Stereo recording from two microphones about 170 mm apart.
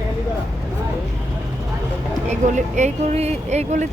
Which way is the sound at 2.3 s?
45° right (ahead or behind).